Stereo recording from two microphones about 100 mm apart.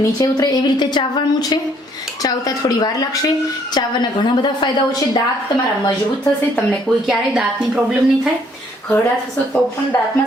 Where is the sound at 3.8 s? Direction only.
50° left (ahead or behind).